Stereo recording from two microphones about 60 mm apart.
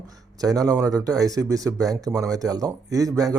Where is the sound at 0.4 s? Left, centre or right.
Right.